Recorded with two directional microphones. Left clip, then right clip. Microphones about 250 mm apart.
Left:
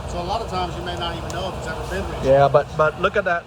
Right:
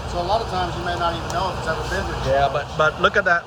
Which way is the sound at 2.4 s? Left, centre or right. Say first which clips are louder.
Left 5 dB; centre.